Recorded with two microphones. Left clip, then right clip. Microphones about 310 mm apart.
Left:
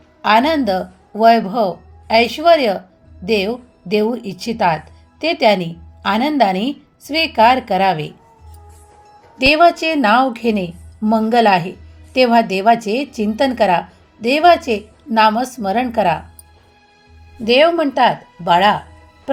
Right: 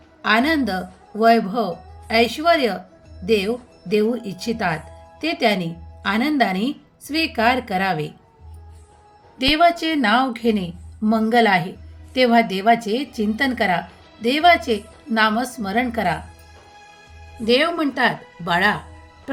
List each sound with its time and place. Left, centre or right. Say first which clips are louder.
0.2 s a woman's voice: left 5 dB; centre
9.4 s a woman's voice: left 5 dB; centre
17.4 s a woman's voice: left 6 dB; centre